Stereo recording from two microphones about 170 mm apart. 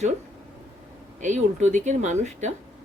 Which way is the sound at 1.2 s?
45° right (ahead or behind).